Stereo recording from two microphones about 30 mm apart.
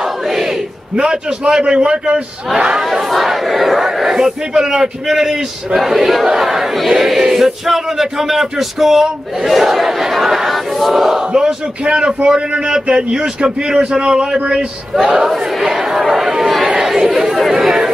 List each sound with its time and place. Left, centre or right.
0.3 s battle cry: centre
0.9 s a man's voice: right
2.5 s a man's voice: right
2.8 s speech: centre
3.8 s speech: centre
11.3 s a man's voice: right
15.1 s crowd: centre
16.8 s chatter: centre